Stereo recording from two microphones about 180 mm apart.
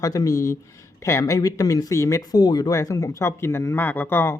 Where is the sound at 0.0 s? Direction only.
20° left (ahead or behind).